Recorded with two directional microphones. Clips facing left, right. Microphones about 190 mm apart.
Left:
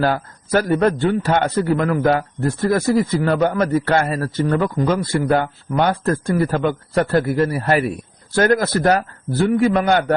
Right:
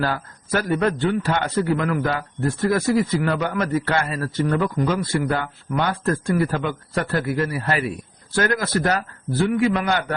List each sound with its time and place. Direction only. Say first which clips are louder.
0.0 s a man's voice: left 5 dB; 45° left (ahead or behind)